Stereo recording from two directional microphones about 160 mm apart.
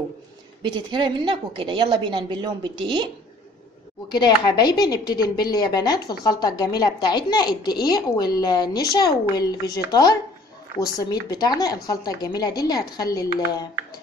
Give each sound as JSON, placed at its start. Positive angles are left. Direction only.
{"t": 0.6, "sound": "a woman's voice", "side_deg": -30}
{"t": 4.1, "sound": "a woman's voice", "side_deg": 25}